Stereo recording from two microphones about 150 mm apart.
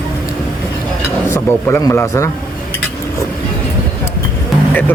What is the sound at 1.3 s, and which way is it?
Speech, 20° left (ahead or behind).